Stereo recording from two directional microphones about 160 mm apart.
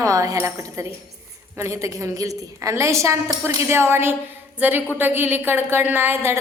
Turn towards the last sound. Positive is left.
turn(degrees=-15)  # may be behind; listen again after turning